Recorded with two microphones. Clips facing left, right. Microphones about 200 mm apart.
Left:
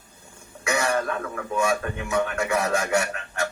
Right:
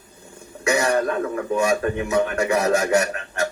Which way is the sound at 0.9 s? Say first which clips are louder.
Right 5 dB; 35° right (ahead or behind).